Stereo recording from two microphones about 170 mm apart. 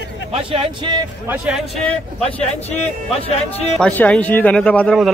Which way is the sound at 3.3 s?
40° left (ahead or behind).